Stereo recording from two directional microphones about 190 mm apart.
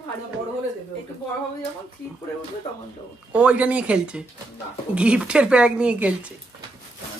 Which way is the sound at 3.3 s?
5° right (ahead or behind).